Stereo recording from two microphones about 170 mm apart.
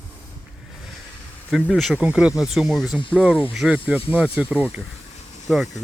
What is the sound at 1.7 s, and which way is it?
Speech, 5° right (ahead or behind).